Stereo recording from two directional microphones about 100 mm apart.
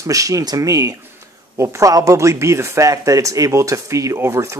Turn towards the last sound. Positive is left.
turn(degrees=-30)  # may be behind; listen again after turning